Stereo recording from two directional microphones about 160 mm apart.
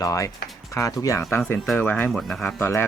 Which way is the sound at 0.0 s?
20° left (ahead or behind).